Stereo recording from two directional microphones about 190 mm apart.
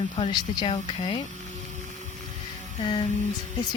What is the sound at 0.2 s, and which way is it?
Speech, 25° left (ahead or behind).